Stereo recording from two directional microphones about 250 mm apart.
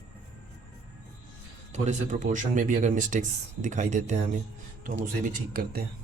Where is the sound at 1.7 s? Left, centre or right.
Right.